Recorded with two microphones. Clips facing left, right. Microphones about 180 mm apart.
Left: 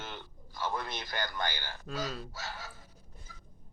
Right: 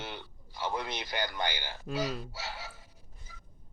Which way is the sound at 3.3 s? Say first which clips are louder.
Right 2 dB; 15° right (ahead or behind).